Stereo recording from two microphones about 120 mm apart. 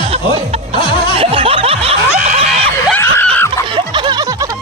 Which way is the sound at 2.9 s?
15° left (ahead or behind).